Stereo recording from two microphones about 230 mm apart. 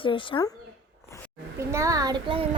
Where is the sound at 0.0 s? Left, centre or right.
Left.